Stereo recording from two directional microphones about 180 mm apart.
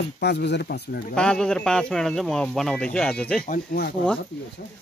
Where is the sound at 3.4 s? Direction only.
55° left (ahead or behind).